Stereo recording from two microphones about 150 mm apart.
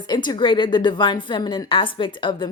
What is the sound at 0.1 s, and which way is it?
A woman's voice, 30° left (ahead or behind).